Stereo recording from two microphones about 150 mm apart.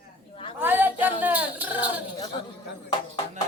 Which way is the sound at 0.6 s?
10° right (ahead or behind).